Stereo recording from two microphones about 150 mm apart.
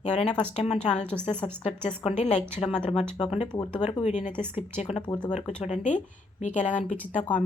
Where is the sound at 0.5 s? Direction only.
45° left (ahead or behind).